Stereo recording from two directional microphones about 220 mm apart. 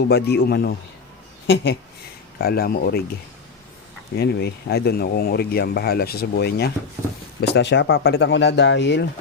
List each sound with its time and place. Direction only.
0.0 s speech: 50° left (ahead or behind)
4.1 s speech: 45° left (ahead or behind)